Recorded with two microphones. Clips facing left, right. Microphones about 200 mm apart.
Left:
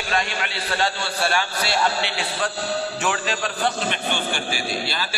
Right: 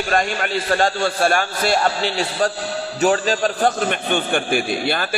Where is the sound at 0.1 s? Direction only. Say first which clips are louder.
Right 5 dB; 45° right (ahead or behind).